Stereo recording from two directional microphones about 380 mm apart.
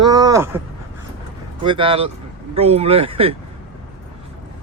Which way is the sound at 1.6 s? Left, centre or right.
Centre.